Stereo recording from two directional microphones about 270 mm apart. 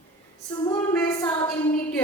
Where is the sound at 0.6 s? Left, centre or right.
Centre.